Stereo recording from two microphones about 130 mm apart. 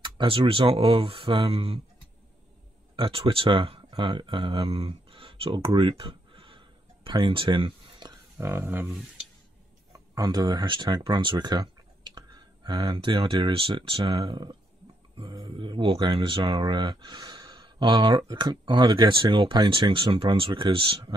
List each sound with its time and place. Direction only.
0.0 s speech: 40° right (ahead or behind)
3.0 s speech: 45° right (ahead or behind)
8.4 s speech: 20° right (ahead or behind)
9.9 s speech: 30° right (ahead or behind)